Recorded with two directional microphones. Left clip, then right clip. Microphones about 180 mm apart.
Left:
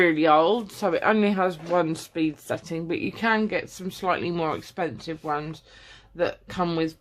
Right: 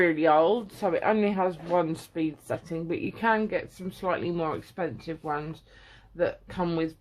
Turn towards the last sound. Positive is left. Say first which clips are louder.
# left 3 dB
turn(degrees=30)  # may be behind; listen again after turning